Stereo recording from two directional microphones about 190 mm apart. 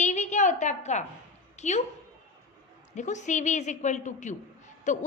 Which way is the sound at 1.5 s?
35° left (ahead or behind).